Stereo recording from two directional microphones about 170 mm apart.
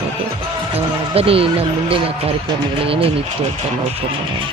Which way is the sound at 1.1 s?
35° right (ahead or behind).